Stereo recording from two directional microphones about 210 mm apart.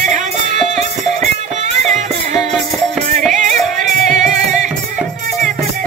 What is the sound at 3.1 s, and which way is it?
Music, 35° right (ahead or behind).